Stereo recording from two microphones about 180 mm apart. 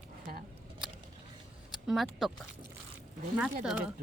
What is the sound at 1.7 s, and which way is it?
Speech, centre (ahead or behind).